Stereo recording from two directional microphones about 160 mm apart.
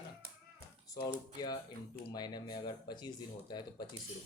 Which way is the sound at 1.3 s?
25° left (ahead or behind).